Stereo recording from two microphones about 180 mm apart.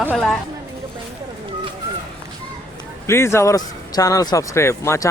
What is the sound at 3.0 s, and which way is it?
Speech, 15° left (ahead or behind).